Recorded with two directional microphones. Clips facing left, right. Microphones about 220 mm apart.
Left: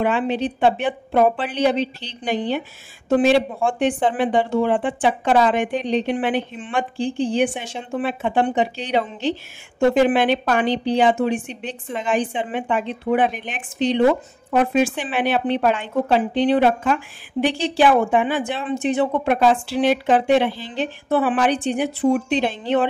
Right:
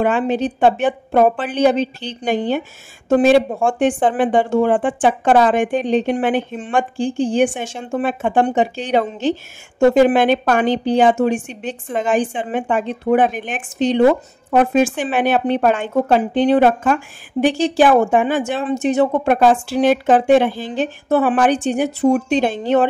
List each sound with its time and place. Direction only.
0.0 s a woman's voice: 45° right (ahead or behind)